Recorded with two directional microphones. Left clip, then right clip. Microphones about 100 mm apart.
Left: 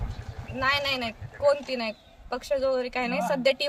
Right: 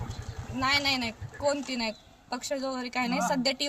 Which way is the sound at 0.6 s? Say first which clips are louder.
Left 1 dB; 30° left (ahead or behind).